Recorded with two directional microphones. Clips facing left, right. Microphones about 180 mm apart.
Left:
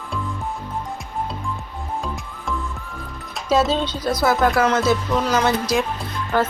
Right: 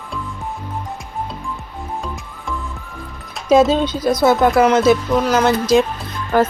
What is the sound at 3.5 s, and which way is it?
Speech, 15° right (ahead or behind).